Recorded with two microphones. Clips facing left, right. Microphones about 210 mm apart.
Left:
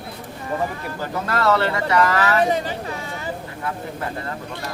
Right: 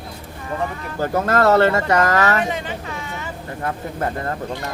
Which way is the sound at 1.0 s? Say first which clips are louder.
Right 5 dB; 45° right (ahead or behind).